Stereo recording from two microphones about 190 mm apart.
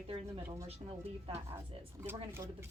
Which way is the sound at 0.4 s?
15° right (ahead or behind).